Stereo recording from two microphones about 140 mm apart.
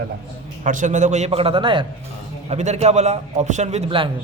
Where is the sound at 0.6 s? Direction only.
60° right (ahead or behind); by 1.8 s 35° right (ahead or behind).